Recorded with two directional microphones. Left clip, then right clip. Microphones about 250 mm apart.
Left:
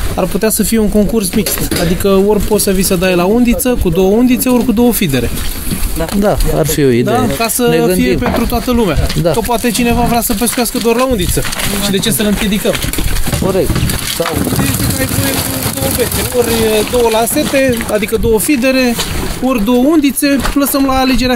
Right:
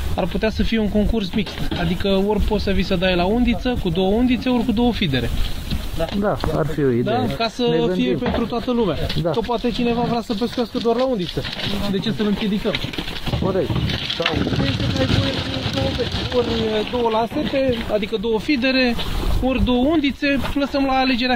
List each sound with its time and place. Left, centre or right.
0.2 s speech: centre
6.2 s speech: left
7.1 s speech: left
7.6 s speech: left
17.2 s speech: left
18.3 s speech: left